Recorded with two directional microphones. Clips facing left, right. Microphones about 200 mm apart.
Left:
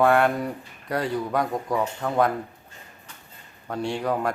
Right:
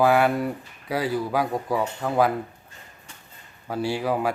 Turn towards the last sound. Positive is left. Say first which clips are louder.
# right 1 dB
turn(degrees=-5)  # may be behind; listen again after turning